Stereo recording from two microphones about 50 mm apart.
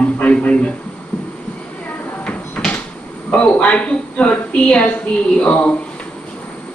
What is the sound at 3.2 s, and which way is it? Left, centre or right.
A man's voice, left.